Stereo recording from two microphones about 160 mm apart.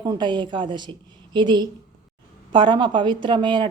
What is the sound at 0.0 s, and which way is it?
A woman's voice, 25° right (ahead or behind).